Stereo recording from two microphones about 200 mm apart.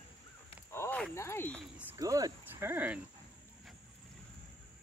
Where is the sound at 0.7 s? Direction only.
10° left (ahead or behind).